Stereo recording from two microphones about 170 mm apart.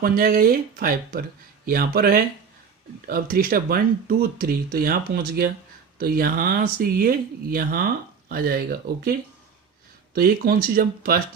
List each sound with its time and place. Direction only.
0.0 s speech: 55° right (ahead or behind)
10.2 s speech: 65° right (ahead or behind)